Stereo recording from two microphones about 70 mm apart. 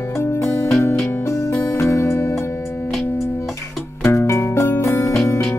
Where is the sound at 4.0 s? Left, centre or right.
Left.